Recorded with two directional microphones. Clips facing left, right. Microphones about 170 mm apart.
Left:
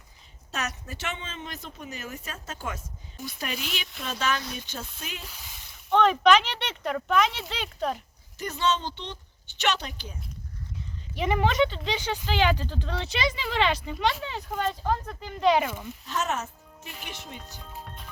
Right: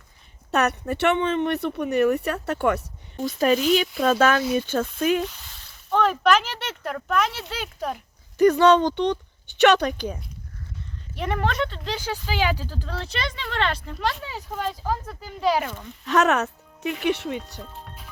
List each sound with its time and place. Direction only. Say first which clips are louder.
0.5 s speech: right 12 dB; 60° right (ahead or behind)
3.2 s speech: right 15 dB; 40° right (ahead or behind)
5.3 s a sound: even; 10° left (ahead or behind)
5.9 s speech: even; 5° right (ahead or behind)
8.4 s speech: right 12 dB; 60° right (ahead or behind)
11.1 s speech: left 1 dB; centre (ahead or behind)
15.6 s speech: left 1 dB; 10° left (ahead or behind)
16.0 s speech: right 10 dB; 70° right (ahead or behind)
17.7 s music: even; centre (ahead or behind)